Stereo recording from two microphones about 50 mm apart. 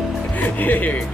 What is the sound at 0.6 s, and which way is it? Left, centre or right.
Music, left.